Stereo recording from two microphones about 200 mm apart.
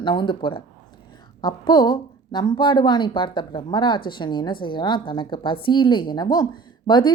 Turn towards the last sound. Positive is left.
turn(degrees=20)  # may be behind; listen again after turning